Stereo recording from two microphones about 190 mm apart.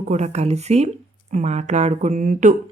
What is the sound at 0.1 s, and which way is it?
Speech, 35° right (ahead or behind).